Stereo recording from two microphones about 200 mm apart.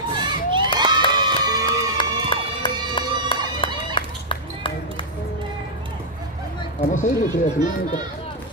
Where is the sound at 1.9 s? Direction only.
25° left (ahead or behind).